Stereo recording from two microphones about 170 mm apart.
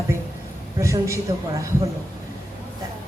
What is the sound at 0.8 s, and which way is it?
Speech, 15° right (ahead or behind).